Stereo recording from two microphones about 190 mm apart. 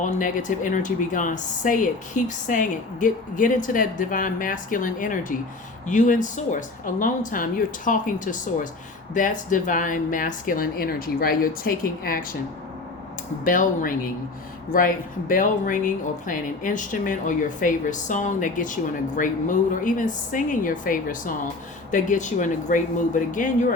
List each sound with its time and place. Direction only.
0.0 s speech: 40° left (ahead or behind)
13.4 s speech: 45° left (ahead or behind)